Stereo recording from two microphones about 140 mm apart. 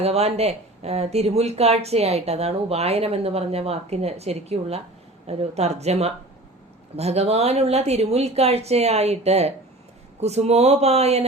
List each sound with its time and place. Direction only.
0.0 s speech: 50° right (ahead or behind)